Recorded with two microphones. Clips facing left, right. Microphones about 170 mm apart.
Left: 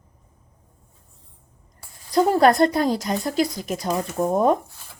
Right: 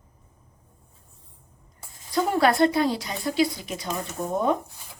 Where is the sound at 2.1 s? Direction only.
40° left (ahead or behind).